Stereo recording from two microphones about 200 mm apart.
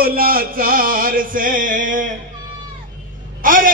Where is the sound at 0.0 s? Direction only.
45° right (ahead or behind).